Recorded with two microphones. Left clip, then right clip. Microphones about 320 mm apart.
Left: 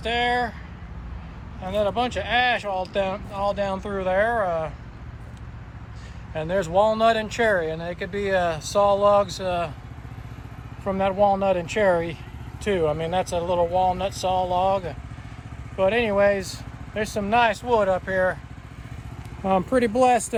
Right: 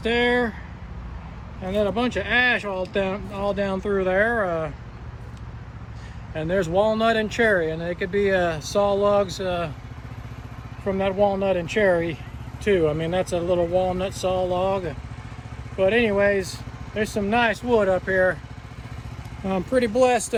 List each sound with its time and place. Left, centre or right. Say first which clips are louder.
0.0 s speech: right 2 dB; centre
1.6 s speech: even; centre
6.3 s speech: even; centre
10.8 s speech: left 1 dB; centre
15.8 s speech: even; centre
19.5 s speech: left 2 dB; centre